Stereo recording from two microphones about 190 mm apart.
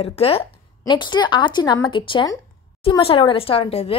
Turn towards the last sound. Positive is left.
turn(degrees=30)  # may be behind; listen again after turning